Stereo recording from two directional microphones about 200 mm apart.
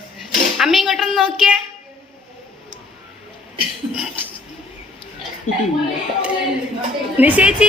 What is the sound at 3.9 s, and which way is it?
Speech, 5° right (ahead or behind).